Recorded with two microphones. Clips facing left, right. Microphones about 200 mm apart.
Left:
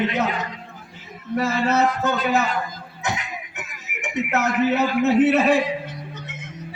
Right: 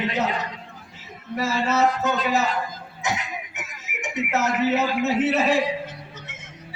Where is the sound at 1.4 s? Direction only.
55° left (ahead or behind).